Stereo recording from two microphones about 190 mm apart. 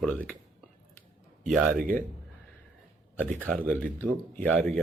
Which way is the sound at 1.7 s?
50° right (ahead or behind).